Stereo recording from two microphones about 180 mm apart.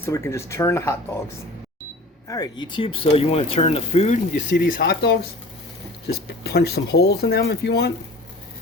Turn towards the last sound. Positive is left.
turn(degrees=65)  # may be behind; listen again after turning